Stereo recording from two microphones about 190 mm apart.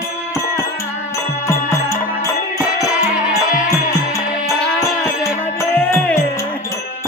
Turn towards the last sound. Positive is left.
turn(degrees=10)  # may be behind; listen again after turning